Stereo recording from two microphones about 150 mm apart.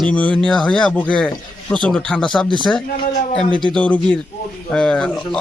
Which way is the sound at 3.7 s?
10° left (ahead or behind).